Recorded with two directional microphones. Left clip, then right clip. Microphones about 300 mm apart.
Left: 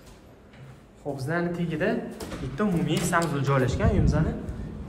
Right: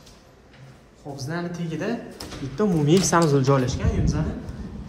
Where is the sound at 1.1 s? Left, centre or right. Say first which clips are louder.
Left 2 dB; centre.